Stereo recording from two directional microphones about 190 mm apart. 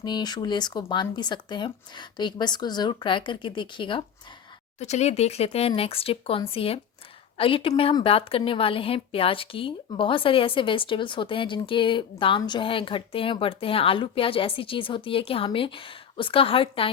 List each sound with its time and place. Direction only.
0.0 s a woman's voice: 20° left (ahead or behind)
4.8 s a woman's voice: 35° left (ahead or behind)